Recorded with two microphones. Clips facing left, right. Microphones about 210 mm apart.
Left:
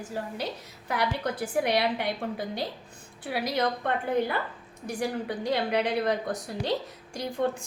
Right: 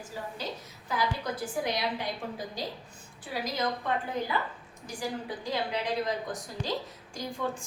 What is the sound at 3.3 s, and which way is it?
A woman's voice, 65° left (ahead or behind).